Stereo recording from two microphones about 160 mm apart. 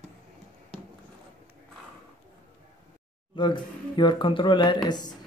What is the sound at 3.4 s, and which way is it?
Speech, 30° left (ahead or behind).